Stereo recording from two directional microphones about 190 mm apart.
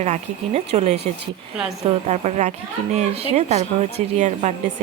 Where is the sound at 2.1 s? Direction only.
35° right (ahead or behind).